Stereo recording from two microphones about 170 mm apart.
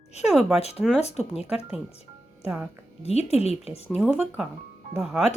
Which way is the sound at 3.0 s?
40° left (ahead or behind).